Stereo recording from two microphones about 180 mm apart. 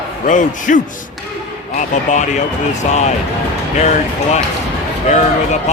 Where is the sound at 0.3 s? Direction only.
45° left (ahead or behind).